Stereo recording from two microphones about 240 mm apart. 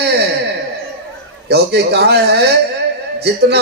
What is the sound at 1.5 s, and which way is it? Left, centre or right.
Speech, right.